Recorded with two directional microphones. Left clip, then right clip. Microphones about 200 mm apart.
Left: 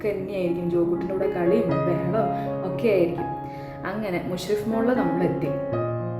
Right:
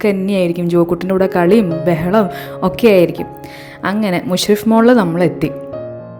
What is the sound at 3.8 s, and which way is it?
A woman's voice, 45° right (ahead or behind).